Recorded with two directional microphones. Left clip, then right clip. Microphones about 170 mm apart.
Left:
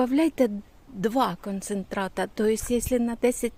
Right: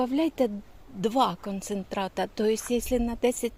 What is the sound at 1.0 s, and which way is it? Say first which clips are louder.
Speech: even; 20° left (ahead or behind).